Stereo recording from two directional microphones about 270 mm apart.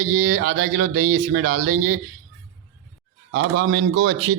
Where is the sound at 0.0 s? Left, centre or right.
Right.